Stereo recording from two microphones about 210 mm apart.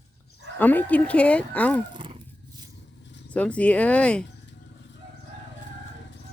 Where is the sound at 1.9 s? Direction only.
25° right (ahead or behind).